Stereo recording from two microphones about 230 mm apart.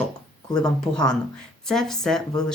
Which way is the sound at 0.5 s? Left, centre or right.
Centre.